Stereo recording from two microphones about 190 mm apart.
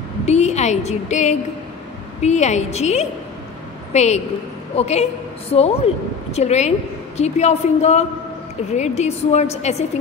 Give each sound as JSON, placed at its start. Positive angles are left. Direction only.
{"t": 0.2, "sound": "a woman's voice", "side_deg": 35}